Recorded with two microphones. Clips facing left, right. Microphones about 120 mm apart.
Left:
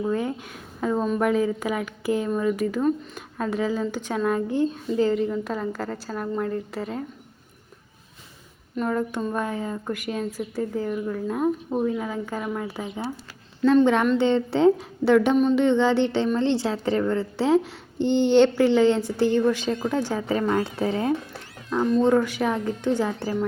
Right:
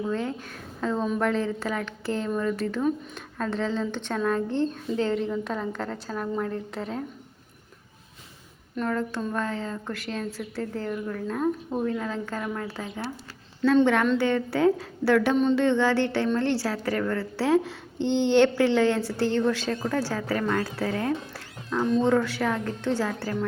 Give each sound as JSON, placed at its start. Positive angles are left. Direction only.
{"t": 0.0, "sound": "a woman's voice", "side_deg": 10}
{"t": 8.9, "sound": "a woman's voice", "side_deg": 15}
{"t": 18.0, "sound": "speech", "side_deg": -15}
{"t": 18.3, "sound": "a woman's voice", "side_deg": 15}